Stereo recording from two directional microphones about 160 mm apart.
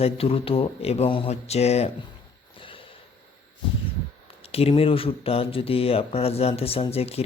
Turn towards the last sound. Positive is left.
turn(degrees=40)  # may be behind; listen again after turning